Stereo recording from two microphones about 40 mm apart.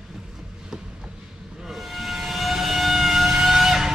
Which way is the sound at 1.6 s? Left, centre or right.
Centre.